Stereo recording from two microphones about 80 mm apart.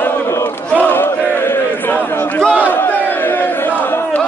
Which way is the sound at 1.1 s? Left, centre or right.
Left.